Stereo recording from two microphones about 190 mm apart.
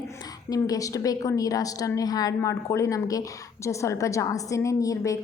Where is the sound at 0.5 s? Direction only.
20° left (ahead or behind).